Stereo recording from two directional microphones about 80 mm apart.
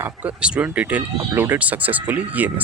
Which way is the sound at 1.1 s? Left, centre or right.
Right.